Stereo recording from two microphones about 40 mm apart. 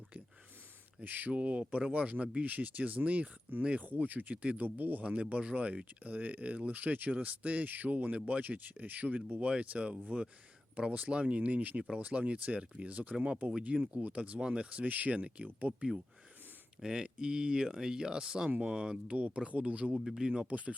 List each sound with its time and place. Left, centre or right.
1.0 s speech: right
1.3 s speech: right
3.8 s speech: right
5.0 s speech: right
12.9 s speech: right
13.4 s speech: right
13.7 s speech: right
14.8 s speech: right
15.1 s speech: right
15.7 s speech: right
16.8 s speech: right
20.1 s speech: centre
20.5 s speech: right